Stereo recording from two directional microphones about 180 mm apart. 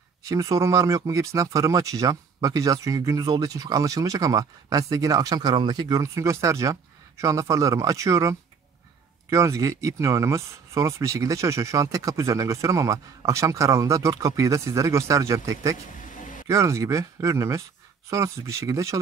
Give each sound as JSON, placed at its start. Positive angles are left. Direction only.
{"t": 0.3, "sound": "speech", "side_deg": -20}